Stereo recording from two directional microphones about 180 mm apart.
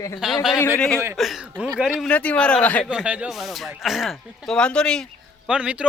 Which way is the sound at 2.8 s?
5° right (ahead or behind).